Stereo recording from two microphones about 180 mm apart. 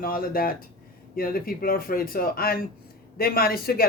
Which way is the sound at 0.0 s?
55° left (ahead or behind).